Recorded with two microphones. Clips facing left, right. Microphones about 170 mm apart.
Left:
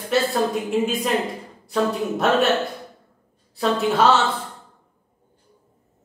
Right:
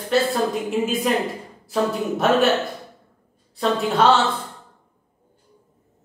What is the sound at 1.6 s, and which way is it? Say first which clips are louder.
Speech: even; centre (ahead or behind).